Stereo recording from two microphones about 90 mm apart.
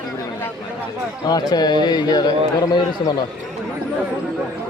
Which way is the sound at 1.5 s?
50° left (ahead or behind).